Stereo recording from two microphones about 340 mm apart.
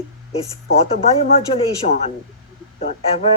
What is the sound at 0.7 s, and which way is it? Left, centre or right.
Speech, centre.